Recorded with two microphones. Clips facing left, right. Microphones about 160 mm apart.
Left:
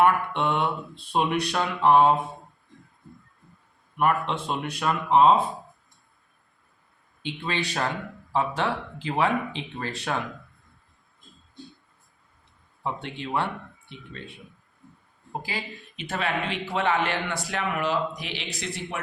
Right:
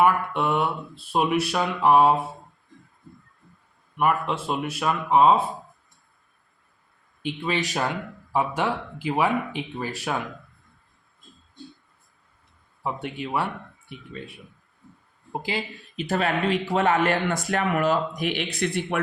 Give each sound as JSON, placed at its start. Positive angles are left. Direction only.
{"t": 0.0, "sound": "speech", "side_deg": -5}
{"t": 3.9, "sound": "speech", "side_deg": -5}
{"t": 7.2, "sound": "speech", "side_deg": -10}
{"t": 12.8, "sound": "speech", "side_deg": -10}
{"t": 15.4, "sound": "speech", "side_deg": -25}
{"t": 16.0, "sound": "speech", "side_deg": -40}